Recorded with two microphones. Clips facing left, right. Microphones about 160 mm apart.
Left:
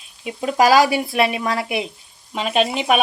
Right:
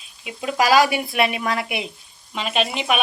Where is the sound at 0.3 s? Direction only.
35° left (ahead or behind).